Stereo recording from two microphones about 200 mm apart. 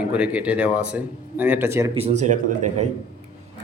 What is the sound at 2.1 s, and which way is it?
Speech, 35° right (ahead or behind).